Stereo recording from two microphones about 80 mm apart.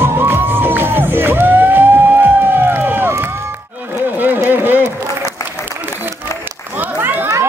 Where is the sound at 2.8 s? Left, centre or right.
Right.